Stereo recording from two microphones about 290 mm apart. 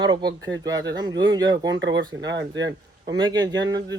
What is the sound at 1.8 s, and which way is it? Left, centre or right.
Speech, right.